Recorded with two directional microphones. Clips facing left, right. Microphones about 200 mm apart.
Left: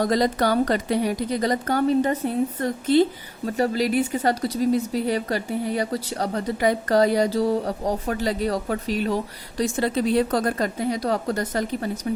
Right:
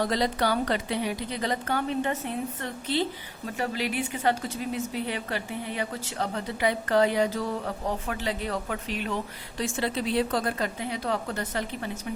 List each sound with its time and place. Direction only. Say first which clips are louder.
0.0 s a woman's voice: left 5 dB; 45° left (ahead or behind)